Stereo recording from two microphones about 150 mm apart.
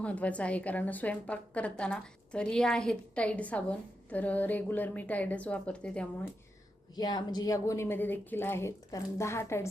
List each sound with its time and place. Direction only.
0.0 s a woman's voice: 10° left (ahead or behind)
6.9 s a woman's voice: 25° left (ahead or behind)